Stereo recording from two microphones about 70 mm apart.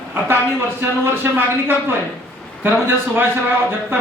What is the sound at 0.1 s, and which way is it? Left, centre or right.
A man's voice, right.